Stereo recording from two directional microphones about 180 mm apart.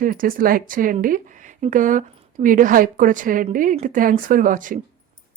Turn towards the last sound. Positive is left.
turn(degrees=-45)  # may be behind; listen again after turning